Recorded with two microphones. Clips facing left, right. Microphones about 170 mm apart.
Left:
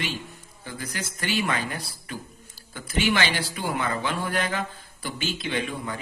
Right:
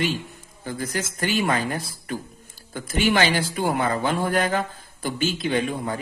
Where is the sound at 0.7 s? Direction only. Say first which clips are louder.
Right 6 dB; 45° right (ahead or behind).